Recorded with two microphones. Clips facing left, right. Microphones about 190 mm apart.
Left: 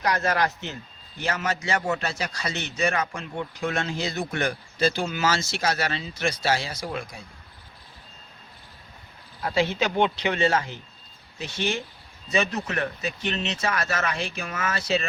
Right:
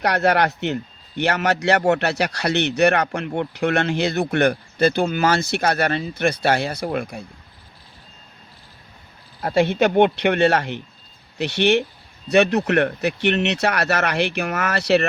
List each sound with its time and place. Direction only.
0.0 s a man's voice: 65° right (ahead or behind)
9.4 s a man's voice: 55° right (ahead or behind); by 15.0 s 70° right (ahead or behind)